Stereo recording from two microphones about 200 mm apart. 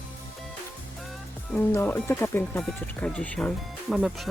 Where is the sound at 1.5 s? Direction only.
10° left (ahead or behind).